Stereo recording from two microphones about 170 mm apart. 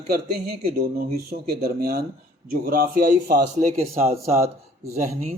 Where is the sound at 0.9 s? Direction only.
60° right (ahead or behind).